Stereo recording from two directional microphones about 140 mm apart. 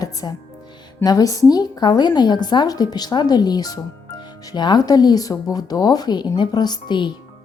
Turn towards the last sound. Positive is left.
turn(degrees=30)  # may be behind; listen again after turning